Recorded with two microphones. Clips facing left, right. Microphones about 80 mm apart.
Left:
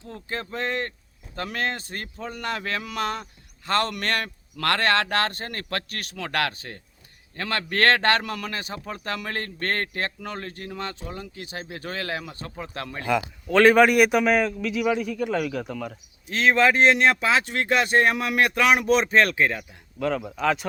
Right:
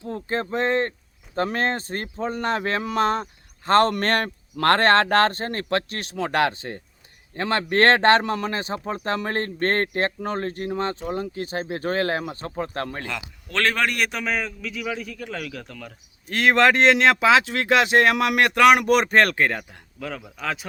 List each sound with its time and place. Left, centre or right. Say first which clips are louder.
0.0 s speech: right 6 dB; right
13.5 s a man's voice: left 8 dB; centre
16.2 s speech: right 2 dB; right
20.0 s a man's voice: left 7 dB; centre